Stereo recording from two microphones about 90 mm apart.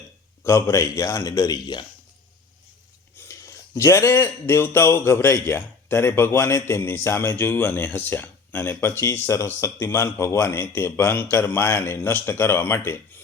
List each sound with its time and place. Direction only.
0.4 s speech: 30° left (ahead or behind)
1.2 s speech: 45° left (ahead or behind)
3.2 s speech: 30° left (ahead or behind)